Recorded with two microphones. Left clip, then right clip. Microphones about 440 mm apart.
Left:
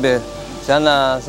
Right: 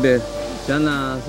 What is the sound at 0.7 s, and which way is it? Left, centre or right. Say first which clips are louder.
Speech: left 8 dB; left.